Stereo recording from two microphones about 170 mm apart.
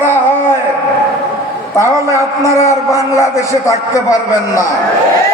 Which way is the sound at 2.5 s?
15° left (ahead or behind).